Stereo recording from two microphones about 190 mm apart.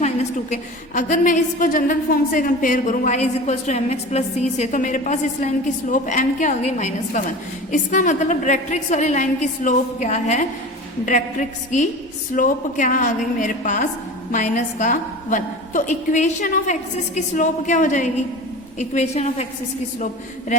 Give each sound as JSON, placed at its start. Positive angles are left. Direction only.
{"t": 0.0, "sound": "a woman's voice", "side_deg": 35}